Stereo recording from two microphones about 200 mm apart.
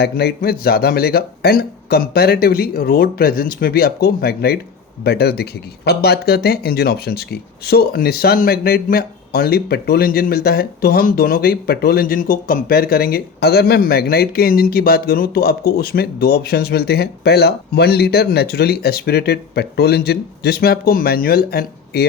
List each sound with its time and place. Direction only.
0.0 s speech: 55° left (ahead or behind)